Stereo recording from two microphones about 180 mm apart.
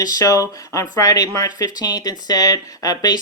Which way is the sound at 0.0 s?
20° left (ahead or behind).